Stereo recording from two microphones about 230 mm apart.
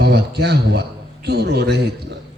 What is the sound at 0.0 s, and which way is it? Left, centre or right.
A man's voice, right.